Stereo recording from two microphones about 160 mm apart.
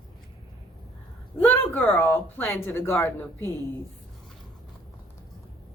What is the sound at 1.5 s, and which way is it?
A woman's voice, 10° left (ahead or behind).